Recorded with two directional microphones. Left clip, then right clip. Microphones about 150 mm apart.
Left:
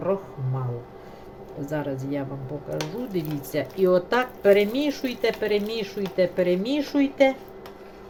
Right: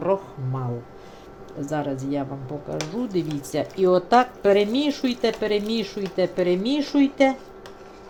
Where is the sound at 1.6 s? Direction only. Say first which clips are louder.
Right 2 dB; 35° right (ahead or behind).